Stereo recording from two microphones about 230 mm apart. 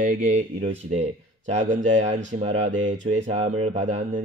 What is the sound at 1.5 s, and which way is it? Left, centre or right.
Speech, right.